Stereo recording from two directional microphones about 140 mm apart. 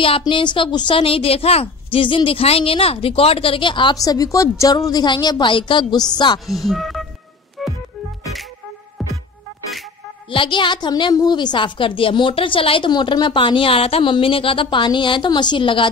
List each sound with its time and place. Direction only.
0.2 s a woman's voice: 35° left (ahead or behind)
6.4 s speech: centre (ahead or behind)
7.6 s music: centre (ahead or behind)
10.3 s a woman's voice: 35° left (ahead or behind)